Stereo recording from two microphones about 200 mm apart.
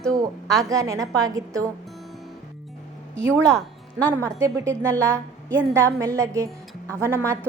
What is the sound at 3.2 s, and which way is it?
A woman's voice, 15° right (ahead or behind).